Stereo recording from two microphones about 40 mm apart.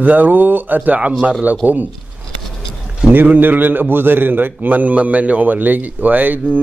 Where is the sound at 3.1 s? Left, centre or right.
Right.